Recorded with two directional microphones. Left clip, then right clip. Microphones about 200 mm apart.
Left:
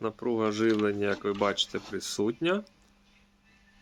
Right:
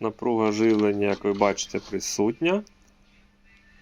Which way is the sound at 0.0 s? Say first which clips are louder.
Right 5 dB; 10° right (ahead or behind).